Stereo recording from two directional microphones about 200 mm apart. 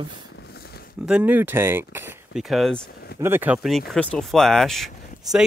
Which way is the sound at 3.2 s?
10° right (ahead or behind).